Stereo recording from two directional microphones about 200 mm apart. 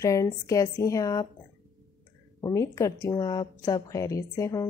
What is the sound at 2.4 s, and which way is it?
A woman's voice, 15° left (ahead or behind).